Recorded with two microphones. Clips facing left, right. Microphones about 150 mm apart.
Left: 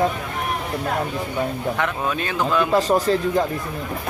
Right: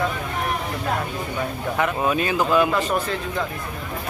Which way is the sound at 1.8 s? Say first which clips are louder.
Right 7 dB; 5° right (ahead or behind).